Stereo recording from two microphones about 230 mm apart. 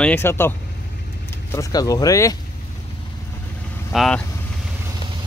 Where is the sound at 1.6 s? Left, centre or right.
Centre.